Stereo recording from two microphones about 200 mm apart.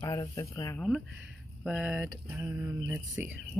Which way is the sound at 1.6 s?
5° right (ahead or behind).